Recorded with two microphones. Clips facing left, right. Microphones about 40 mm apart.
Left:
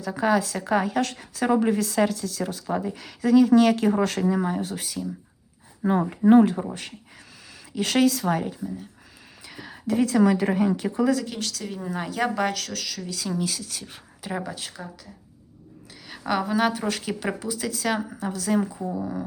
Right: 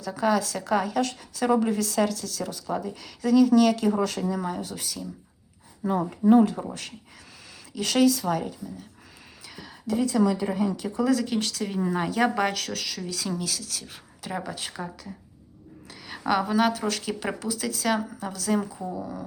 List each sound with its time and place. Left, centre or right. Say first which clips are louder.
0.0 s speech: left 2 dB; left
0.9 s speech: left 1 dB; left
1.5 s speech: left 4 dB; left
7.8 s speech: even; left
9.5 s a sound: left 3 dB; centre
9.8 s a woman's voice: left 3 dB; left
11.0 s a woman's voice: right 1 dB; centre
13.3 s speech: left 3 dB; left
13.8 s speech: left 2 dB; centre
14.4 s a woman's voice: even; centre
14.7 s a woman's voice: right 4 dB; centre